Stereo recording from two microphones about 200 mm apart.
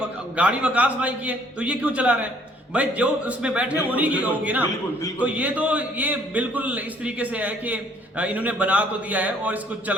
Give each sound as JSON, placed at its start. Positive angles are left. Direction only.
{"t": 0.3, "sound": "a man's voice", "side_deg": -5}